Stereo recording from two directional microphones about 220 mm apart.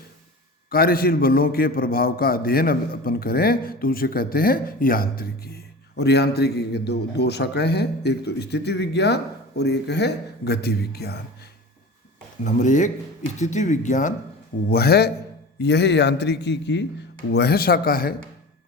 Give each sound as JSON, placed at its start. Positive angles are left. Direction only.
{"t": 0.7, "sound": "a man's voice", "side_deg": 40}
{"t": 12.5, "sound": "speech", "side_deg": 35}
{"t": 14.7, "sound": "a man's voice", "side_deg": 45}